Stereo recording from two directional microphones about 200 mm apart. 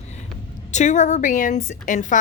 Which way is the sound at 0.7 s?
35° left (ahead or behind).